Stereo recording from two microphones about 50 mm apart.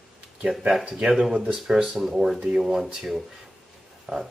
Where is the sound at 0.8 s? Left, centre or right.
Centre.